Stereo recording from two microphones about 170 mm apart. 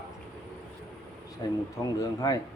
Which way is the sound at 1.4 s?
25° left (ahead or behind).